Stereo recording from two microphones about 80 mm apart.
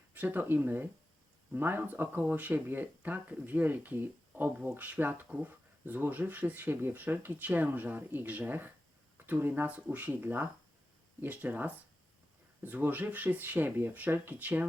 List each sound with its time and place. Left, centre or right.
0.1 s speech: right